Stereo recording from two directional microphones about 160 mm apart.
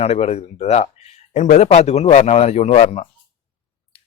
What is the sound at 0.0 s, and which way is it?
Speech, 40° left (ahead or behind).